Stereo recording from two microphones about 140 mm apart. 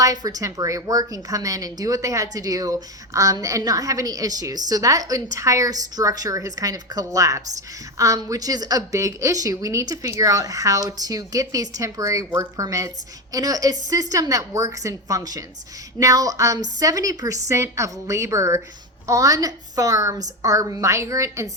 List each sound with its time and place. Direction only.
0.0 s speech: 25° right (ahead or behind)